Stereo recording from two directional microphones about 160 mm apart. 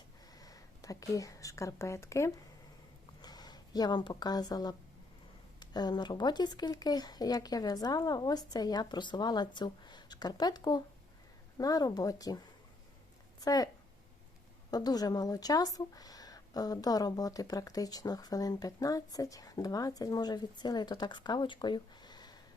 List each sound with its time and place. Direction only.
0.3 s speech: 20° left (ahead or behind)
13.4 s speech: 25° left (ahead or behind)
14.7 s speech: 25° left (ahead or behind)